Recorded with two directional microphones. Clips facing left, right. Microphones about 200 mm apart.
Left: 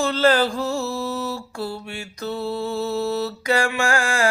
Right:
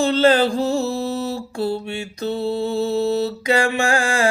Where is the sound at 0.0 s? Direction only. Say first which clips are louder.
Right 3 dB; 20° right (ahead or behind).